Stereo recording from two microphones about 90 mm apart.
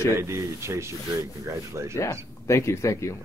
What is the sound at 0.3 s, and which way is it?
Speech, 30° right (ahead or behind).